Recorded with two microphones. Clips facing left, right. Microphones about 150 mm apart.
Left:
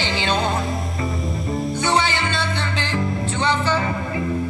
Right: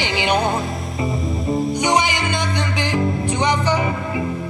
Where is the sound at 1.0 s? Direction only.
Centre (ahead or behind).